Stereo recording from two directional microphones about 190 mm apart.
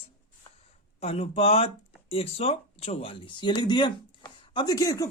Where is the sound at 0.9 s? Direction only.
30° left (ahead or behind).